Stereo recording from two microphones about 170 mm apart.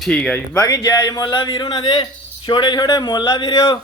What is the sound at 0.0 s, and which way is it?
Speech, 5° left (ahead or behind).